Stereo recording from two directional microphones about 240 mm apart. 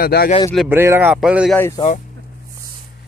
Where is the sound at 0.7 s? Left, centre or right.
Centre.